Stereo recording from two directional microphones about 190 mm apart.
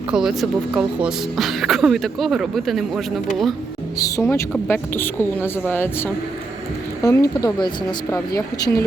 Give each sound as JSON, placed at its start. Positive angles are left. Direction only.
{"t": 0.1, "sound": "speech", "side_deg": 0}
{"t": 3.9, "sound": "a woman's voice", "side_deg": 15}